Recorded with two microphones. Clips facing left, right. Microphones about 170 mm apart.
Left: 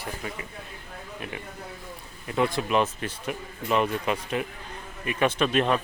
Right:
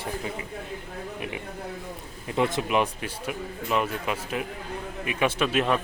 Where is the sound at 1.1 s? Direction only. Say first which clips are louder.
Left 1 dB; 15° right (ahead or behind).